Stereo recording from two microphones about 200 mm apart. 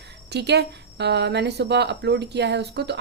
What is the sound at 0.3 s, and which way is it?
A woman's voice, 55° right (ahead or behind).